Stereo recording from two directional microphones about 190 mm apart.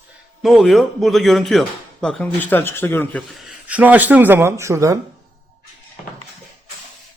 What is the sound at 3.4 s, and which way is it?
Speech, 5° right (ahead or behind).